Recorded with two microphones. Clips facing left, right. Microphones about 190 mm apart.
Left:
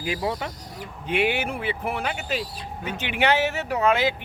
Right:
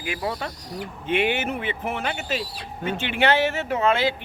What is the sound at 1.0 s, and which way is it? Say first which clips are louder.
Speech: right 1 dB; 5° left (ahead or behind).